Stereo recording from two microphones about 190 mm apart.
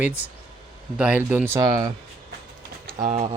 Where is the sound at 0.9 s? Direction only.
5° right (ahead or behind).